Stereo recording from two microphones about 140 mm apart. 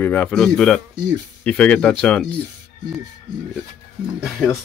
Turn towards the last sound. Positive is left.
turn(degrees=-5)  # may be behind; listen again after turning